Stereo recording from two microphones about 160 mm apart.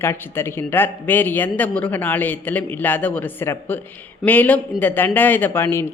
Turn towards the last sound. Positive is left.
turn(degrees=15)  # may be behind; listen again after turning